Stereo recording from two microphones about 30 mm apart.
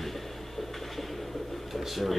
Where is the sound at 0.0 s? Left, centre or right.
Centre.